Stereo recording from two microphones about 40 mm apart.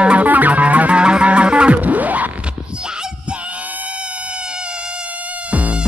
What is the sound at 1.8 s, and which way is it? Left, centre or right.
Music, right.